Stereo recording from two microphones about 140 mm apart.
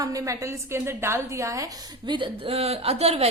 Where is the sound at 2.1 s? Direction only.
35° right (ahead or behind).